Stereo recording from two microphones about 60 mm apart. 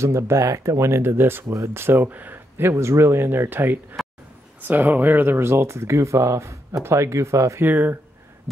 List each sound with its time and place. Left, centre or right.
0.0 s speech: right
2.7 s speech: right
7.6 s speech: right